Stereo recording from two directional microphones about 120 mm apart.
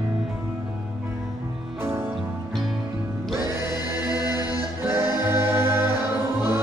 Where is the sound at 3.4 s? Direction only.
35° left (ahead or behind).